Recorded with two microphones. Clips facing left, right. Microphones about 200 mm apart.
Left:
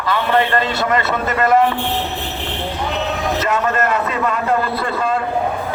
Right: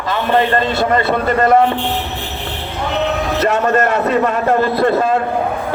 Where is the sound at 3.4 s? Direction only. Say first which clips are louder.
Right 6 dB; 45° right (ahead or behind).